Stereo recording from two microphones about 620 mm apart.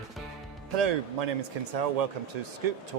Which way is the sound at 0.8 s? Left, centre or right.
Right.